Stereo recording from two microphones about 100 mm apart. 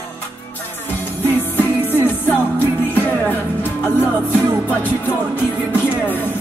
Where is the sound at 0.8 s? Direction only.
20° left (ahead or behind).